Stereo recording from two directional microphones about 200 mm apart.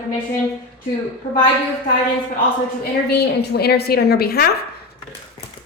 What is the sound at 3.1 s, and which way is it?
A woman's voice, 55° left (ahead or behind).